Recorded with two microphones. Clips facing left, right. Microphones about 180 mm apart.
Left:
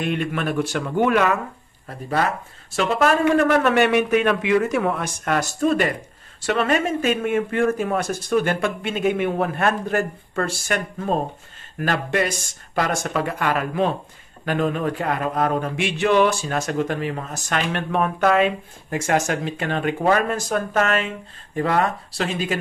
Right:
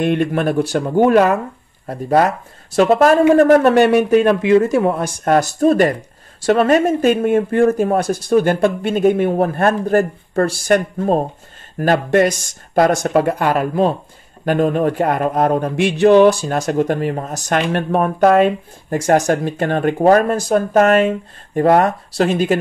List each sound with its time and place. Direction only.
0.0 s speech: 45° right (ahead or behind)